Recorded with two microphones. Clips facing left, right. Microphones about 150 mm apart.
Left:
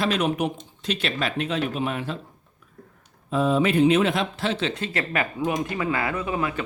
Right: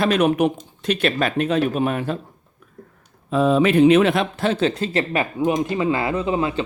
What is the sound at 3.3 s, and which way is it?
Speech, 80° right.